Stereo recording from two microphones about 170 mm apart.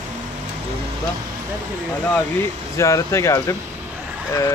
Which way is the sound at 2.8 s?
15° left (ahead or behind).